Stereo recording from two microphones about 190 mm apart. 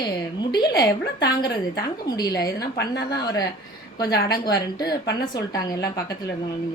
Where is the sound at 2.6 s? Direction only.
60° left (ahead or behind).